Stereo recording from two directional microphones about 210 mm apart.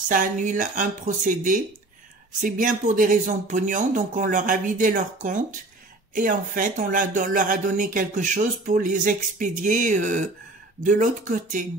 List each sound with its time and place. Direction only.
0.1 s speech: 40° right (ahead or behind)